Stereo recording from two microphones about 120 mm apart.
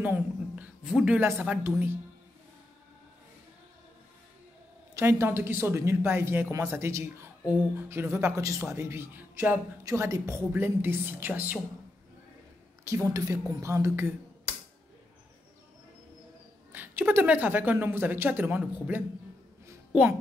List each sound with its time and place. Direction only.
0.0 s a sound: 10° right (ahead or behind)
0.9 s a woman's voice: 10° right (ahead or behind)
4.9 s a woman's voice: 20° right (ahead or behind)
12.8 s speech: 25° right (ahead or behind)
16.7 s a woman's voice: 15° right (ahead or behind)